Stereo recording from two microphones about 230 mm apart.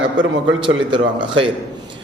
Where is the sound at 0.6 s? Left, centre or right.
Right.